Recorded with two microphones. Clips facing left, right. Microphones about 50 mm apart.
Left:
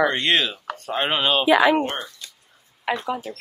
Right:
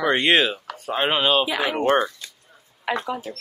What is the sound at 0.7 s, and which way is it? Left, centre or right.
Speech, centre.